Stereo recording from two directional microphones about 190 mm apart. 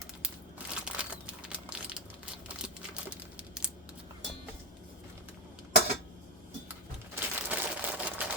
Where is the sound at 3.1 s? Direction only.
5° right (ahead or behind).